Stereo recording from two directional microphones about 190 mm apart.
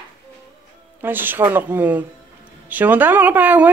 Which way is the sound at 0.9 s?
10° right (ahead or behind).